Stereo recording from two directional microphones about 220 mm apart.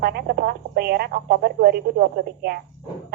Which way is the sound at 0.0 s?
45° right (ahead or behind).